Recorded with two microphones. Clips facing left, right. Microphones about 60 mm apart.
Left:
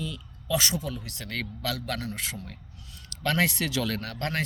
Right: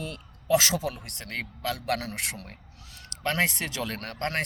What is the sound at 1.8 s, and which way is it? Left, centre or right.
Speech, right.